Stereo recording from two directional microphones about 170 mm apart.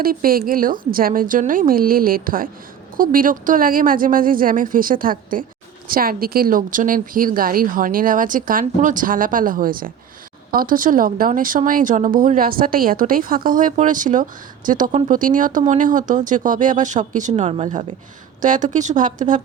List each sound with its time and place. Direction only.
0.0 s speech: 60° right (ahead or behind)